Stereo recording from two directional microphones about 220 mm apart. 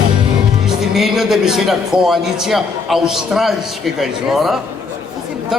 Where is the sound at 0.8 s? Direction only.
Centre (ahead or behind).